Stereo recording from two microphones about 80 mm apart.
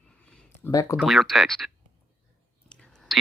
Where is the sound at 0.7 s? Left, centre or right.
Left.